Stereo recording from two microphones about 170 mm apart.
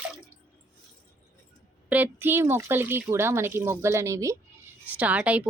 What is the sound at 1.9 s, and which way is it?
Speech, 10° right (ahead or behind).